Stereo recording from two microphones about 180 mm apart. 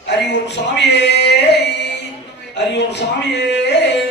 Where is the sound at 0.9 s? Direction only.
70° left (ahead or behind).